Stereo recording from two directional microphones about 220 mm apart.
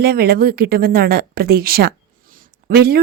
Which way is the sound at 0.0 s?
45° right (ahead or behind).